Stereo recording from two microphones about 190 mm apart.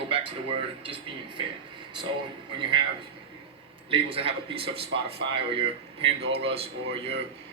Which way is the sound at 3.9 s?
30° right (ahead or behind).